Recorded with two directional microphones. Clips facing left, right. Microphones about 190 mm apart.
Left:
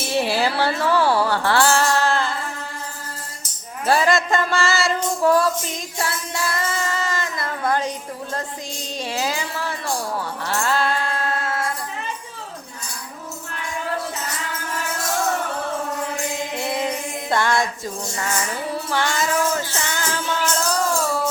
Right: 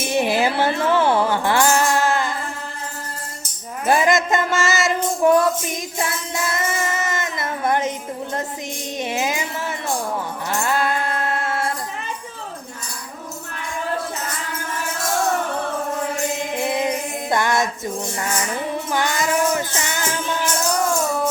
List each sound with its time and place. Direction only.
0.0 s music: 15° right (ahead or behind)
3.8 s music: 15° right (ahead or behind)
6.0 s child singing: 20° right (ahead or behind)
9.0 s music: 20° right (ahead or behind)
10.5 s mantra: 15° right (ahead or behind)
16.6 s music: 15° right (ahead or behind)